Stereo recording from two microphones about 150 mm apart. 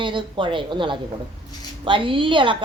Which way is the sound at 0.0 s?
35° right (ahead or behind).